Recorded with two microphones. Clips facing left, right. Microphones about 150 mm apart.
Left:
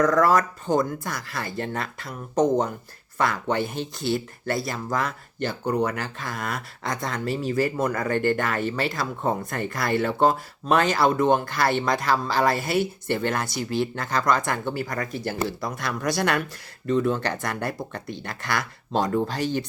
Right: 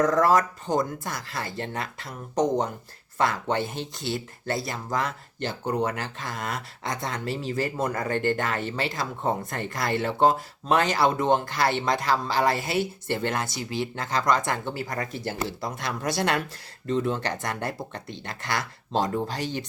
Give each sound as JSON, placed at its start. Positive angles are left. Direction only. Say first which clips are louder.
{"t": 0.0, "sound": "speech", "louder": "left 1 dB", "side_deg": -25}